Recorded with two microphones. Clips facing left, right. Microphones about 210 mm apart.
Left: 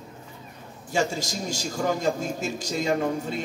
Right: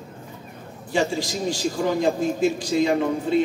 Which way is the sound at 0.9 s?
45° left (ahead or behind).